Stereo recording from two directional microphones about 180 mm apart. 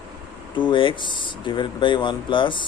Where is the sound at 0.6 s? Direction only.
30° left (ahead or behind).